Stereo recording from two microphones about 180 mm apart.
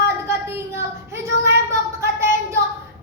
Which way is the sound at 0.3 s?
15° right (ahead or behind).